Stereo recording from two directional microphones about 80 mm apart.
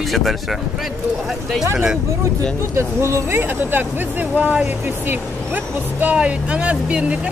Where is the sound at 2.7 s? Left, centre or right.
Right.